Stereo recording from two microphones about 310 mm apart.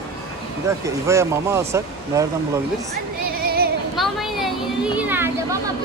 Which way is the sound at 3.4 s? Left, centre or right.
Right.